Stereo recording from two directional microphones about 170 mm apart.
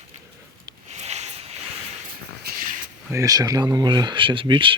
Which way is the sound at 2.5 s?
70° right (ahead or behind).